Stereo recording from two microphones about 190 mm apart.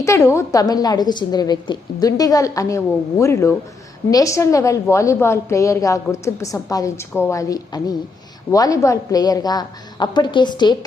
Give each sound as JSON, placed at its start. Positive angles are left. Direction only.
{"t": 0.0, "sound": "a woman's voice", "side_deg": 15}